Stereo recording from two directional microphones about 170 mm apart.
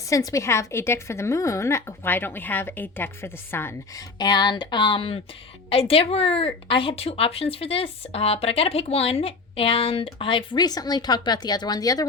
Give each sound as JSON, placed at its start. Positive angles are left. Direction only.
{"t": 0.1, "sound": "a woman's voice", "side_deg": 20}
{"t": 4.2, "sound": "speech", "side_deg": 25}